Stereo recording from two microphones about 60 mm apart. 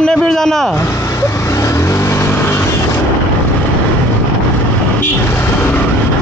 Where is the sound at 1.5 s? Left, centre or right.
Left.